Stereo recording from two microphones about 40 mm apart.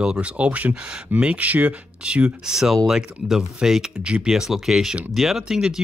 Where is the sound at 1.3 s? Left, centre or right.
Right.